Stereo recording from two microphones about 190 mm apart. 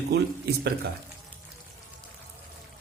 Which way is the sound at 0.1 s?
60° right (ahead or behind).